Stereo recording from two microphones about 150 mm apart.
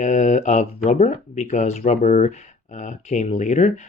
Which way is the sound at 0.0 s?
55° left (ahead or behind).